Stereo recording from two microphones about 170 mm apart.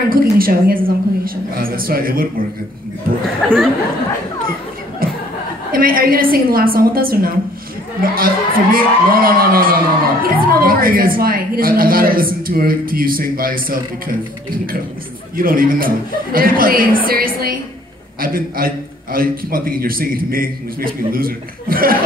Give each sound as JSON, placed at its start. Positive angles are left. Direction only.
{"t": 0.1, "sound": "speech", "side_deg": -60}
{"t": 3.4, "sound": "speech", "side_deg": 5}
{"t": 5.0, "sound": "chuckle", "side_deg": -60}
{"t": 5.7, "sound": "speech", "side_deg": -60}